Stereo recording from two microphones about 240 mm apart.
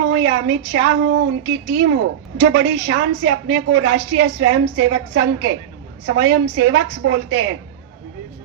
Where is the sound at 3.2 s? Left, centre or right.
Right.